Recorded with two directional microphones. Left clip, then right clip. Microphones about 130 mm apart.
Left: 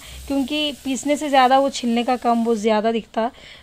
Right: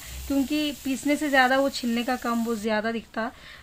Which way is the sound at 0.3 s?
40° left (ahead or behind).